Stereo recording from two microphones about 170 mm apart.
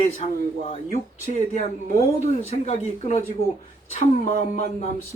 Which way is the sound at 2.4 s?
40° left (ahead or behind).